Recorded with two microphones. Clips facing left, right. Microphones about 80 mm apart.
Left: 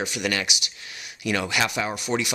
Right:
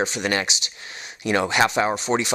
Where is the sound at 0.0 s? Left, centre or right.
Right.